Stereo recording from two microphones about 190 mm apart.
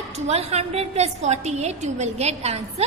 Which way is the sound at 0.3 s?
35° right (ahead or behind).